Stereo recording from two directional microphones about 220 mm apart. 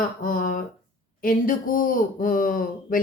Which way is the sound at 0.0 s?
40° left (ahead or behind).